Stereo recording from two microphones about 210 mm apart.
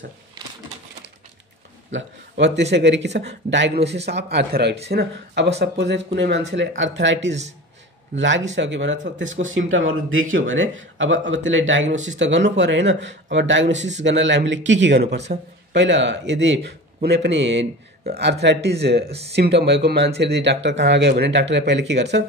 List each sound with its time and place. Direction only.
1.9 s a man's voice: 60° right (ahead or behind)
8.2 s a man's voice: 60° right (ahead or behind)
19.0 s speech: 30° right (ahead or behind)
19.3 s a man's voice: 50° right (ahead or behind)